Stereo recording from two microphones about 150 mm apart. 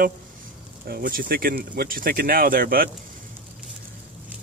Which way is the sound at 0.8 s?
80° right.